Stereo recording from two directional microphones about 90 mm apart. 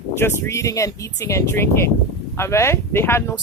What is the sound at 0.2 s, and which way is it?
Speech, 30° left (ahead or behind).